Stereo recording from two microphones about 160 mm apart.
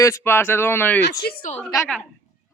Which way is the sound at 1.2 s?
80° left.